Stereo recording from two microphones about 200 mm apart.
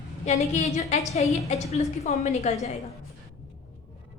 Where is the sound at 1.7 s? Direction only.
30° left (ahead or behind).